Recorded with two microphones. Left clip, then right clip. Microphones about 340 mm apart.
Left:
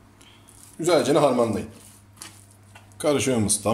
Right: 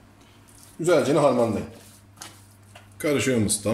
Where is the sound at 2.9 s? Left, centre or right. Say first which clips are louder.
Left 1 dB; centre.